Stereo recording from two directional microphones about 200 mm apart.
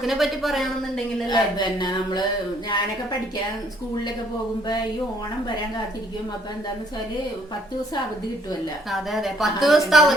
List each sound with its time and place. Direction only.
0.0 s a woman's voice: centre (ahead or behind)
1.3 s speech: 20° left (ahead or behind)
8.9 s a woman's voice: centre (ahead or behind)